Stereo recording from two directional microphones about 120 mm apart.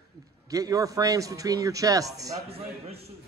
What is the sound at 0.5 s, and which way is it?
A man's voice, 30° right (ahead or behind).